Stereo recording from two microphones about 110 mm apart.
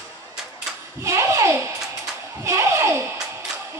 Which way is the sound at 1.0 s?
25° right (ahead or behind).